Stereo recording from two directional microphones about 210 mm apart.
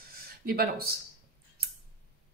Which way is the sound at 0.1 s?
45° right (ahead or behind).